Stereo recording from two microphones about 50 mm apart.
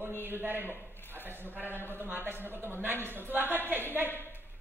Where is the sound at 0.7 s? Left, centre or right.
Left.